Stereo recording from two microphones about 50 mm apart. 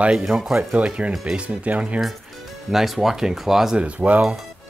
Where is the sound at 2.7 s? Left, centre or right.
Centre.